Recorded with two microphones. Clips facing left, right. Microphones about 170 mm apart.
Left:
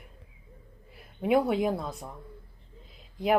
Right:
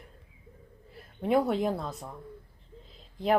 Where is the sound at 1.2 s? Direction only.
10° left (ahead or behind).